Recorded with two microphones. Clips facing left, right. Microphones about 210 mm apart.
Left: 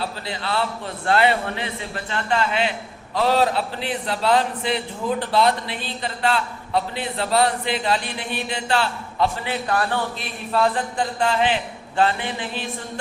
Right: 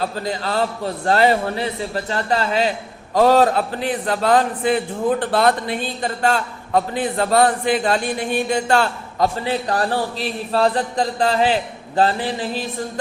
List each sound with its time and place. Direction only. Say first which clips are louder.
0.0 s a man's voice: right 5 dB; 40° right (ahead or behind)